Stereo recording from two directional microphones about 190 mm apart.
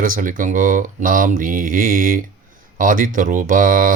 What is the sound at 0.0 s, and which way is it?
Speech, 45° right (ahead or behind).